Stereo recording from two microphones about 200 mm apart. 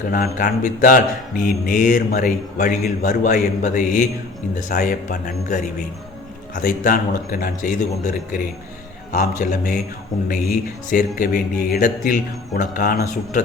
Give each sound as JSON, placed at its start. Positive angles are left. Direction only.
{"t": 0.1, "sound": "a man's voice", "side_deg": 45}
{"t": 10.9, "sound": "speech", "side_deg": 45}